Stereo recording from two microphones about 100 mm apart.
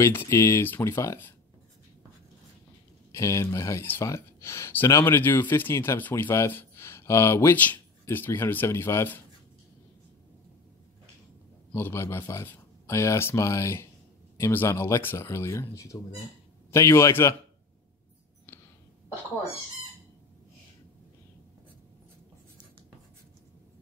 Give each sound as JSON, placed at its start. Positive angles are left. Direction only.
{"t": 0.0, "sound": "speech", "side_deg": 25}
{"t": 3.1, "sound": "speech", "side_deg": 30}
{"t": 11.7, "sound": "speech", "side_deg": 25}